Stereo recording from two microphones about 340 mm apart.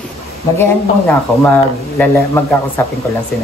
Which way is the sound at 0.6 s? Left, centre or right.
Centre.